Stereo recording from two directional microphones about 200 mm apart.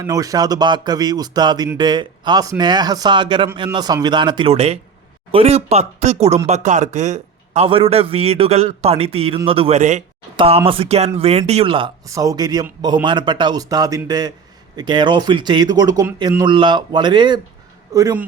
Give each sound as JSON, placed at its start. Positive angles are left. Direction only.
{"t": 0.0, "sound": "a man's voice", "side_deg": -15}